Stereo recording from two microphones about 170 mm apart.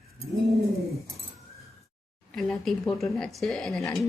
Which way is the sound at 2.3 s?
Centre (ahead or behind).